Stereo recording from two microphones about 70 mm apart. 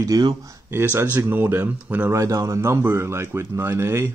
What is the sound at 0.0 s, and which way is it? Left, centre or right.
Speech, right.